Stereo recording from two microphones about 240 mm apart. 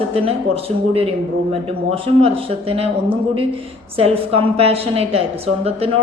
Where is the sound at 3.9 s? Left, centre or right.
Right.